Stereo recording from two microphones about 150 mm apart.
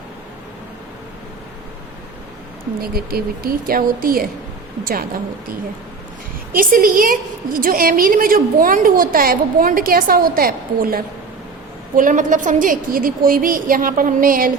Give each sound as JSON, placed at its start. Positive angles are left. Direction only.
{"t": 2.8, "sound": "a woman's voice", "side_deg": -85}
{"t": 6.6, "sound": "a woman's voice", "side_deg": -70}
{"t": 11.9, "sound": "a woman's voice", "side_deg": -60}